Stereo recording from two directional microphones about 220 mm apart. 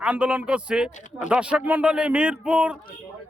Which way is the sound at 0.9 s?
35° left (ahead or behind).